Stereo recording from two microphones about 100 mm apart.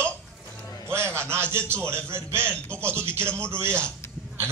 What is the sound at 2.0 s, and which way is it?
Speech, 25° right (ahead or behind).